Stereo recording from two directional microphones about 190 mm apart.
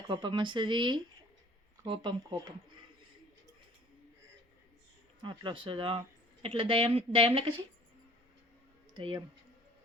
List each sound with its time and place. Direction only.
0.1 s speech: 25° right (ahead or behind)
5.2 s speech: 25° right (ahead or behind)
9.0 s speech: 25° right (ahead or behind)